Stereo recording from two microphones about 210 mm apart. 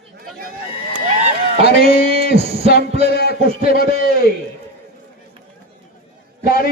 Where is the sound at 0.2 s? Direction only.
45° right (ahead or behind).